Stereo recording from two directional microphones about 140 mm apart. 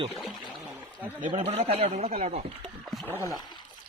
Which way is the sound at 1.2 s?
35° right (ahead or behind).